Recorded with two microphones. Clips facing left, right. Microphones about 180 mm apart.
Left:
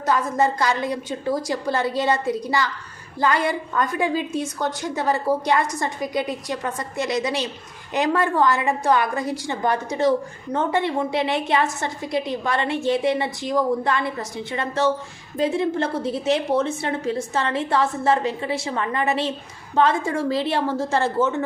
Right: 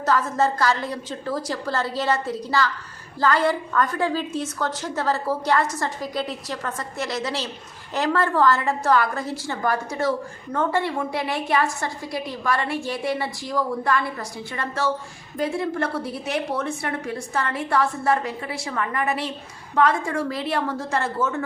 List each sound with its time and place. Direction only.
0.0 s a woman's voice: 15° left (ahead or behind)